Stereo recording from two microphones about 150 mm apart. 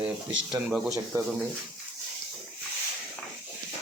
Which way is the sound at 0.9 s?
20° right (ahead or behind).